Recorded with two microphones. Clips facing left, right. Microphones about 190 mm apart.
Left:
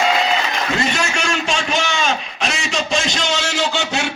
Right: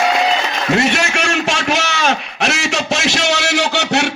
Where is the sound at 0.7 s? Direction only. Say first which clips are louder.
Right 6 dB; 65° right (ahead or behind).